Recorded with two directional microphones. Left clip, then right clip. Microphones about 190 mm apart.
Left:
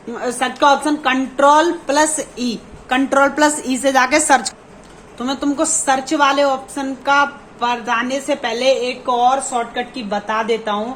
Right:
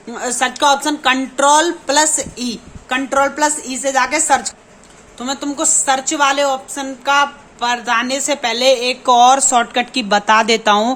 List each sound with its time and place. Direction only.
0.1 s a woman's voice: 15° right (ahead or behind)
9.0 s a woman's voice: 45° right (ahead or behind)